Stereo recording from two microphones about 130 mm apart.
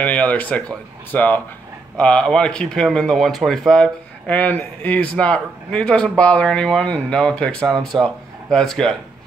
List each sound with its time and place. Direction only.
0.0 s speech: 10° left (ahead or behind)